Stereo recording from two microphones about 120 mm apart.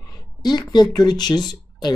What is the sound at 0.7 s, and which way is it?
Speech, 35° left (ahead or behind).